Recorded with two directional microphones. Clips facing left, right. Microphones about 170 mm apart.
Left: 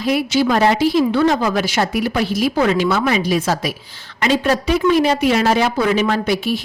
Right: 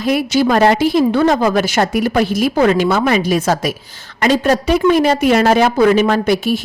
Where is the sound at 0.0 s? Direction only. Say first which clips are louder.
Right 2 dB; 50° right (ahead or behind).